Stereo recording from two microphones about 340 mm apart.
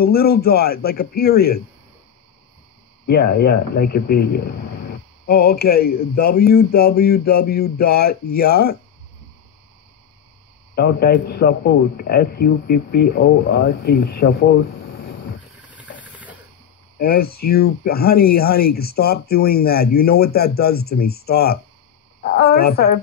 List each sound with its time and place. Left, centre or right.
0.0 s speech: left
3.1 s speech: left
10.7 s speech: left
16.0 s hiss: centre
17.0 s speech: left